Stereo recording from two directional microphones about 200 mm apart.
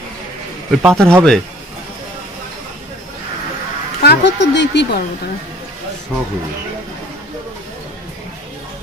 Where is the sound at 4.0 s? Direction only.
55° left (ahead or behind).